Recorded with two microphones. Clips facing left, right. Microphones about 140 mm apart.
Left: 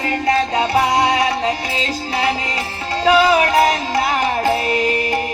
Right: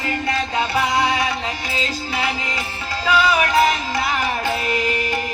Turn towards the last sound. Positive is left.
turn(degrees=30)  # may be behind; listen again after turning